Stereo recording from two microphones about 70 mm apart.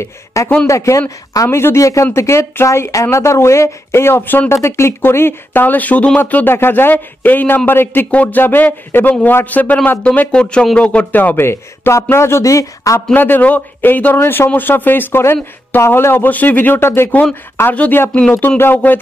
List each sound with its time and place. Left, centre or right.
0.0 s speech: left
4.6 s speech: left
13.1 s speech: left
17.7 s speech: left